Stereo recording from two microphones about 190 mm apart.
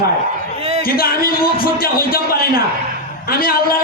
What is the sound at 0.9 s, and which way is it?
A man's voice, 50° left (ahead or behind).